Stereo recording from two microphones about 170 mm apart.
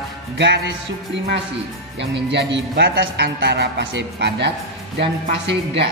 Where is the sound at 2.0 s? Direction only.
90° right.